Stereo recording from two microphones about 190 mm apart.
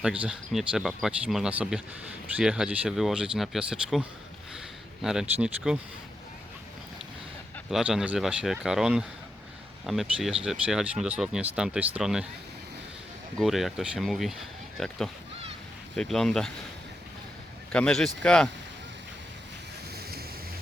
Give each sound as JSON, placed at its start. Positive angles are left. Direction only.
{"t": 0.0, "sound": "speech", "side_deg": -5}
{"t": 5.0, "sound": "speech", "side_deg": -5}
{"t": 7.7, "sound": "speech", "side_deg": 0}
{"t": 13.4, "sound": "speech", "side_deg": 0}
{"t": 17.7, "sound": "speech", "side_deg": 5}
{"t": 20.0, "sound": "a sound", "side_deg": -55}